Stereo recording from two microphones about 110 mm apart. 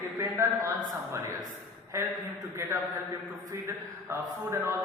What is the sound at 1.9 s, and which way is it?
Speech, 25° right (ahead or behind).